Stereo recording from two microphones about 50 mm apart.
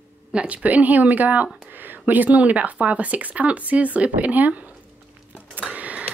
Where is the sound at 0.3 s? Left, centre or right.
Right.